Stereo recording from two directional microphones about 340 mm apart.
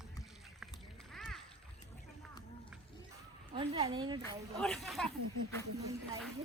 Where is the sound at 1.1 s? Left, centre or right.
Centre.